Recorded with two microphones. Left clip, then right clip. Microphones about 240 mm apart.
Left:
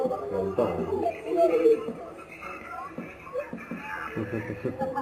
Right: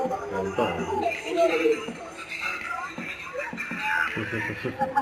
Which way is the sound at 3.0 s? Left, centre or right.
Centre.